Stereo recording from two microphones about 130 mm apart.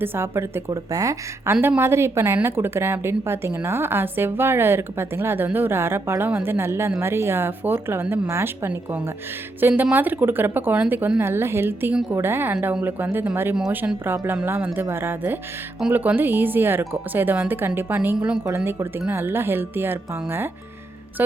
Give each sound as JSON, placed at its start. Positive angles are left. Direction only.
{"t": 0.0, "sound": "a woman's voice", "side_deg": -15}